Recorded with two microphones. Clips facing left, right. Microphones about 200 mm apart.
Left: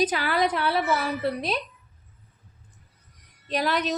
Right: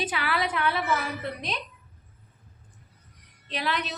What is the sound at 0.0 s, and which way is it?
A woman's voice, 40° left (ahead or behind).